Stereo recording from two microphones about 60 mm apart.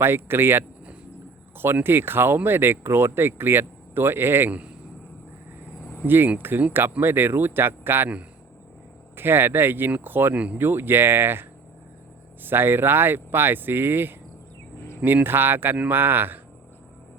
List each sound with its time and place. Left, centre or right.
0.0 s speech: right
6.1 s speech: right
9.1 s speech: right
10.3 s speech: right
10.6 s speech: right